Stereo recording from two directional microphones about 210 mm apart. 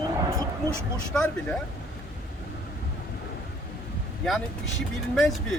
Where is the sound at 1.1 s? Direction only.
5° left (ahead or behind).